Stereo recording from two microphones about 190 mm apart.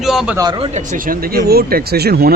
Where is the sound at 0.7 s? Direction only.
50° right (ahead or behind).